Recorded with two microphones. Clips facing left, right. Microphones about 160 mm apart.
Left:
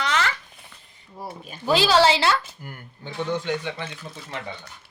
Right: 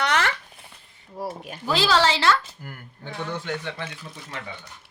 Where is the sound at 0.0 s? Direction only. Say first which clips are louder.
Right 1 dB; 60° right (ahead or behind).